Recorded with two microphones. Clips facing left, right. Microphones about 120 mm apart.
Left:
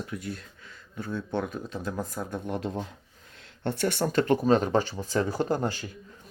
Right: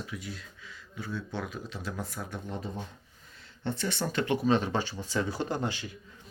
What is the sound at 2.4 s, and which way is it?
Speech, 80° left.